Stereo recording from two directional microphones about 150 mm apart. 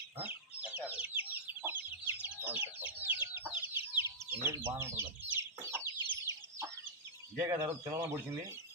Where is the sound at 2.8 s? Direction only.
10° right (ahead or behind).